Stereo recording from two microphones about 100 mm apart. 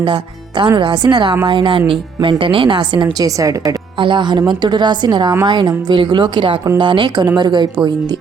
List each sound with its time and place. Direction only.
0.0 s a woman's voice: 50° right (ahead or behind)
3.2 s a woman's voice: 35° right (ahead or behind)
3.9 s a woman's voice: 55° right (ahead or behind)